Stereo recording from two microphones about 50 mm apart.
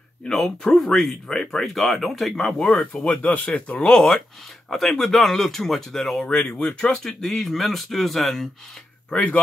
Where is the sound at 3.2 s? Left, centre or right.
Left.